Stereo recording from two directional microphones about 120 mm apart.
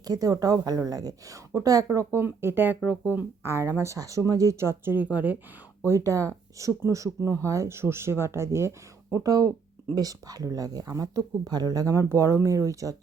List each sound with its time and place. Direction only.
0.0 s speech: 30° right (ahead or behind); by 5.4 s 15° right (ahead or behind)
5.8 s speech: 25° right (ahead or behind)